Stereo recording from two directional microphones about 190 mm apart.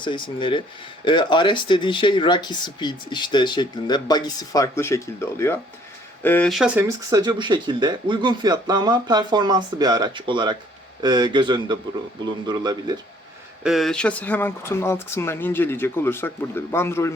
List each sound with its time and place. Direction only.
0.0 s speech: 25° left (ahead or behind); by 6.8 s 5° right (ahead or behind)
6.8 s speech: 20° right (ahead or behind)
13.7 s speech: centre (ahead or behind)